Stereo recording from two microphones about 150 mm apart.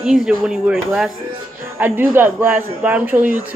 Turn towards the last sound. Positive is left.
turn(degrees=-10)  # may be behind; listen again after turning